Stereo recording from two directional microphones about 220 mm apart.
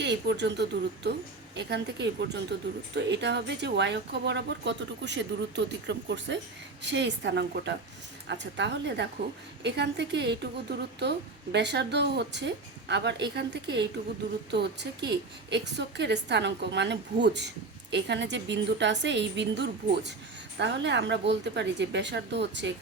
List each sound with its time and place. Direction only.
0.0 s speech: 50° right (ahead or behind)